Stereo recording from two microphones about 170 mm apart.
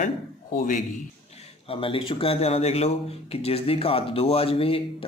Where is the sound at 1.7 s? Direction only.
30° left (ahead or behind).